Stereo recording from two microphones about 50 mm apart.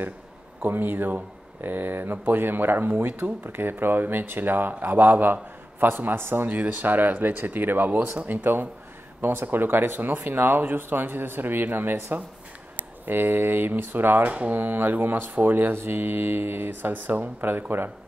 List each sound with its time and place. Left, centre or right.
0.6 s mantra: right
3.4 s speech: right
9.2 s mantra: right
12.7 s speech: right
14.5 s mantra: right